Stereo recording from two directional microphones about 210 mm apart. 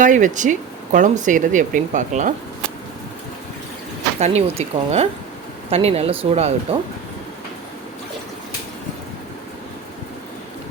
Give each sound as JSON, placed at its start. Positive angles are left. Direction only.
{"t": 0.0, "sound": "speech", "side_deg": -35}
{"t": 4.2, "sound": "speech", "side_deg": -30}